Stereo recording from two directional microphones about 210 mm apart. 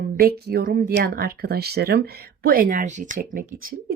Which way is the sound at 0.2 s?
45° right (ahead or behind).